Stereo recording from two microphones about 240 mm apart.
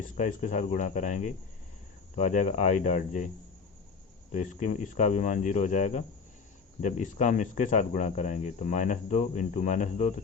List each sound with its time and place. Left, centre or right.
0.2 s speech: left
4.3 s speech: left